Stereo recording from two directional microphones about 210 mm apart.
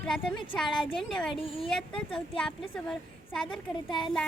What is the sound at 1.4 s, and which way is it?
Speech, 25° left (ahead or behind).